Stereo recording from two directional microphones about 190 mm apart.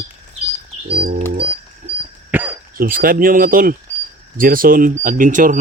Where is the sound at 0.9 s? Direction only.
55° right (ahead or behind).